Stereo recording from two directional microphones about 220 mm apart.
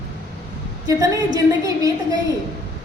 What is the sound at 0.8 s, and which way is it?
A woman's voice, 15° right (ahead or behind).